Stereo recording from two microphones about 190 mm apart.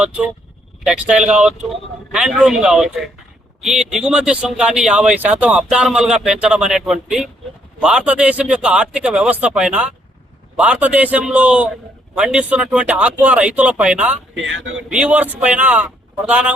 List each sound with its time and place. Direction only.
0.9 s speech: 5° right (ahead or behind)
14.4 s speech: 85° right
14.8 s speech: 5° right (ahead or behind)